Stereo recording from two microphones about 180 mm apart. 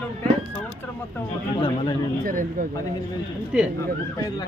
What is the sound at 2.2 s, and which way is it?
Speech, 50° right (ahead or behind).